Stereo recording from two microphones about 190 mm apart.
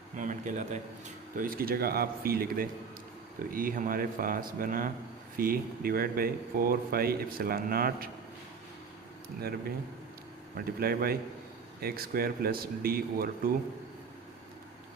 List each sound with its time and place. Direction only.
0.2 s speech: 40° right (ahead or behind)
9.4 s speech: 55° right (ahead or behind)